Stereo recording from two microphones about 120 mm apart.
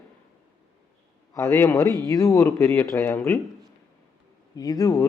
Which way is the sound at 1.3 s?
25° left (ahead or behind).